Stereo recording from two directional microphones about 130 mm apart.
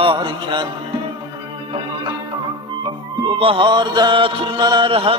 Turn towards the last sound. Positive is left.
turn(degrees=-45)  # may be behind; listen again after turning